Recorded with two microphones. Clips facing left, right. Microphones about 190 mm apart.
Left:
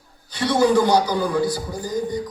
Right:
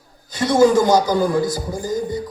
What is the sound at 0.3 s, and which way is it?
A man's voice, 45° right (ahead or behind).